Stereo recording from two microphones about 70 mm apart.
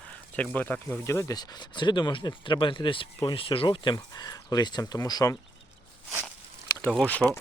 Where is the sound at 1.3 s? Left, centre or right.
Left.